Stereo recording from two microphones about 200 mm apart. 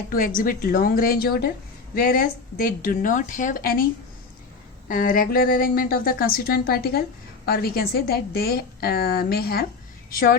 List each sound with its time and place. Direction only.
0.1 s a woman's voice: 45° left (ahead or behind)
4.9 s a woman's voice: 45° left (ahead or behind)